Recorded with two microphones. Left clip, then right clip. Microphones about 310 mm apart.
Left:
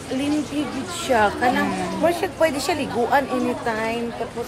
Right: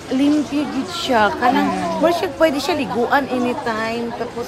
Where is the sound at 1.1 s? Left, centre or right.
Right.